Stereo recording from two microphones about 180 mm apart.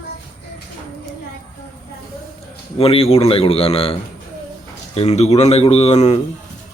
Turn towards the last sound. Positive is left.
turn(degrees=35)  # may be behind; listen again after turning